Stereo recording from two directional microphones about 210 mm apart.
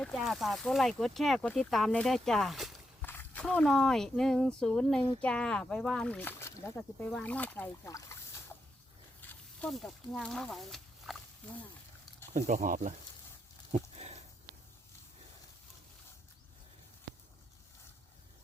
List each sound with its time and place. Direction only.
0.0 s speech: centre (ahead or behind)
9.3 s speech: 5° left (ahead or behind)
12.3 s speech: 35° right (ahead or behind)
13.7 s a sound: 30° right (ahead or behind)